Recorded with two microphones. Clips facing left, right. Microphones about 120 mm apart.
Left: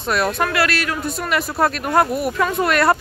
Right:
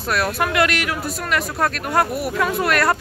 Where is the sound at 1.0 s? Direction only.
5° left (ahead or behind).